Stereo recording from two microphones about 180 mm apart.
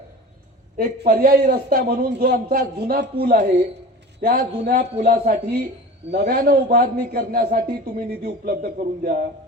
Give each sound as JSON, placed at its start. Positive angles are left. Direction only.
{"t": 0.8, "sound": "a man's voice", "side_deg": -50}